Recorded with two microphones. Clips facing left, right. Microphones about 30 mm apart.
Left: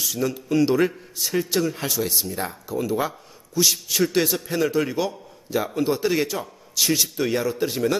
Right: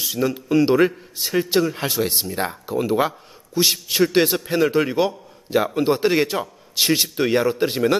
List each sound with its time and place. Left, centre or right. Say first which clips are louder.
0.0 s a man's voice: right 3 dB; right